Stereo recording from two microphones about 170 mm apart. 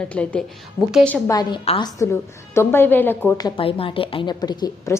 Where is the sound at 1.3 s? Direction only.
25° left (ahead or behind).